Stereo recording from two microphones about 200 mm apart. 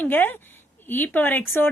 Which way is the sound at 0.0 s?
10° left (ahead or behind).